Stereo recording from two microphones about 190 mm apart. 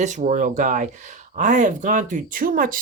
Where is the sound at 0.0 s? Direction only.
40° right (ahead or behind).